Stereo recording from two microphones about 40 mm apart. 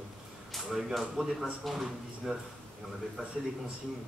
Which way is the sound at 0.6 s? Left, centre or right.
Centre.